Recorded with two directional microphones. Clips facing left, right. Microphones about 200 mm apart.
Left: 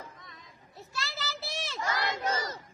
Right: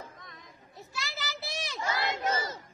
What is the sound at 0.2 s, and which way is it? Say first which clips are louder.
Chatter: right 2 dB; 50° right (ahead or behind).